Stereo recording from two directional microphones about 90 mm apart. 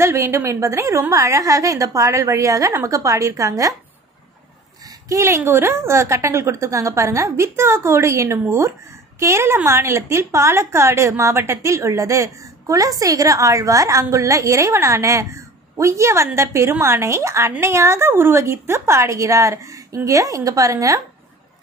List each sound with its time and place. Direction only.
0.0 s a woman's voice: 30° right (ahead or behind)
5.0 s a woman's voice: 35° right (ahead or behind)